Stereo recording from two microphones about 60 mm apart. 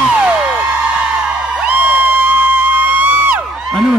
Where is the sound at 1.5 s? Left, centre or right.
Right.